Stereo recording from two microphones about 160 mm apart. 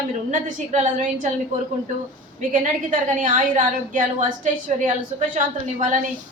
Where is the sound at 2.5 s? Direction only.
50° right (ahead or behind).